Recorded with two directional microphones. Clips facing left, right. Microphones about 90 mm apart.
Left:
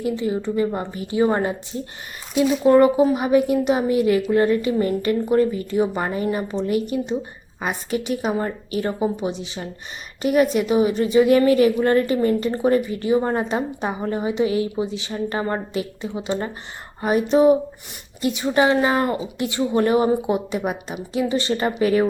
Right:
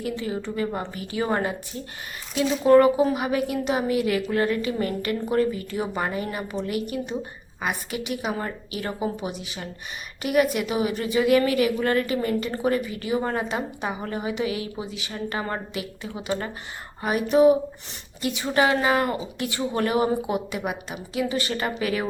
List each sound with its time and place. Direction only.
0.0 s a woman's voice: 20° left (ahead or behind)